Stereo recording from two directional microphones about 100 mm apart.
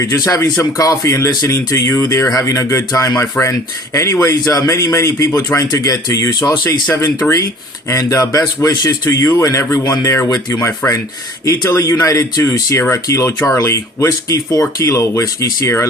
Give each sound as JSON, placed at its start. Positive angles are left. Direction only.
{"t": 0.0, "sound": "speech", "side_deg": 30}
{"t": 10.5, "sound": "speech", "side_deg": 25}